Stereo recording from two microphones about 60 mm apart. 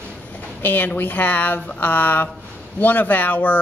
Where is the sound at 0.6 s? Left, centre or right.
Left.